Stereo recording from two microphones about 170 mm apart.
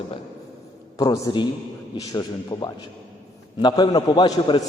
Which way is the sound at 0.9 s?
20° left (ahead or behind).